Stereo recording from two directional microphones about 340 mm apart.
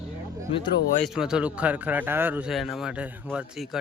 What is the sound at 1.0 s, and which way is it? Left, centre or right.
Speech, centre.